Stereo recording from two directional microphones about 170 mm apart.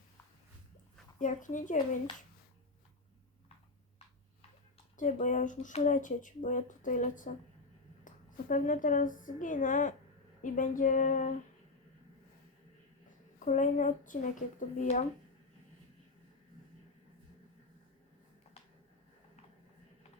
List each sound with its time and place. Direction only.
1.2 s speech: 50° left (ahead or behind)
4.9 s a woman's voice: 45° left (ahead or behind)
13.1 s a woman's voice: 45° left (ahead or behind)